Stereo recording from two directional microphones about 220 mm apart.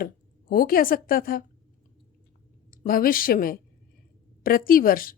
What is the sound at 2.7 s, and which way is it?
Speech, 40° left (ahead or behind).